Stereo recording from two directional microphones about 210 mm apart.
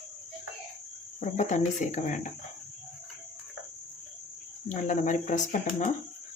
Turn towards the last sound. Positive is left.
turn(degrees=35)  # may be behind; listen again after turning